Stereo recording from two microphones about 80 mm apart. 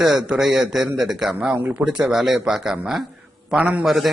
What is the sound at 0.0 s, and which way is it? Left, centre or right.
A man's voice, centre.